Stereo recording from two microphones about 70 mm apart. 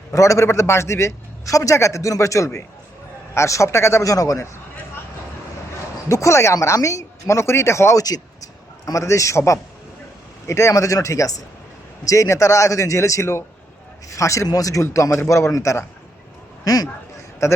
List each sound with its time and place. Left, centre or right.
0.1 s a man's voice: left
6.1 s a man's voice: left
7.9 s a man's voice: left
16.6 s speech: left
17.4 s a man's voice: left